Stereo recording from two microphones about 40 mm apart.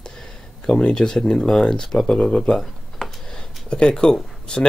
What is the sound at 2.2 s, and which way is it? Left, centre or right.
Speech, left.